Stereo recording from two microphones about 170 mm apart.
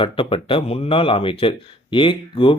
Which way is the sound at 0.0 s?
30° left (ahead or behind).